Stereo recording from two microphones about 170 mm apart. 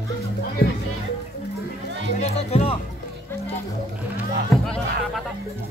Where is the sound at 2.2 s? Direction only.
40° left (ahead or behind).